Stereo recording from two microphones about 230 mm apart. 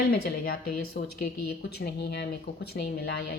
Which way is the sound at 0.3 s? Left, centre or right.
Left.